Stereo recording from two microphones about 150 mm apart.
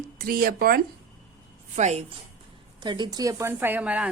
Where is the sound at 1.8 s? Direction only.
45° right (ahead or behind).